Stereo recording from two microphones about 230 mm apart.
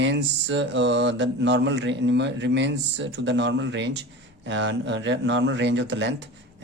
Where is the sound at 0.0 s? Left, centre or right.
Right.